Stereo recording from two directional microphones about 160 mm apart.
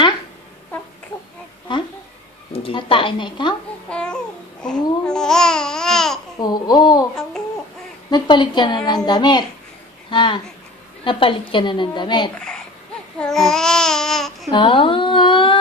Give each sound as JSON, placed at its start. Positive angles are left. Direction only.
{"t": 2.5, "sound": "speech", "side_deg": 35}
{"t": 3.9, "sound": "babbling", "side_deg": 5}
{"t": 6.4, "sound": "a woman's voice", "side_deg": 25}
{"t": 8.1, "sound": "a woman's voice", "side_deg": 30}
{"t": 13.2, "sound": "babbling", "side_deg": 5}
{"t": 14.5, "sound": "speech", "side_deg": 30}